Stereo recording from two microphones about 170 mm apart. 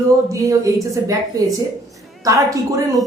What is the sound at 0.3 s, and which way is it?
A woman's voice, 20° right (ahead or behind).